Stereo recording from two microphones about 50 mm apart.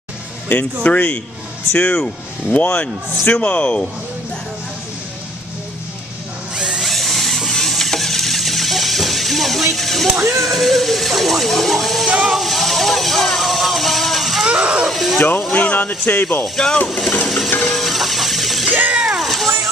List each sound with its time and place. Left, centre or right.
0.5 s speech: left
6.5 s drill: centre
6.8 s a sound: centre
9.8 s speech: centre
12.2 s vehicle: centre
14.5 s speech: centre
14.9 s speech: centre
15.1 s speech: left
17.6 s music: centre
18.9 s a sound: centre